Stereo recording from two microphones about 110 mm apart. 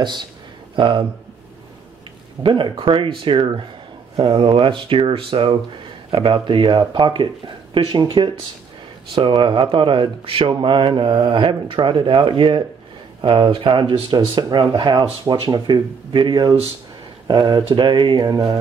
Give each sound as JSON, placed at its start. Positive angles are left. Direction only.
{"t": 0.0, "sound": "speech", "side_deg": -45}
{"t": 2.4, "sound": "speech", "side_deg": -50}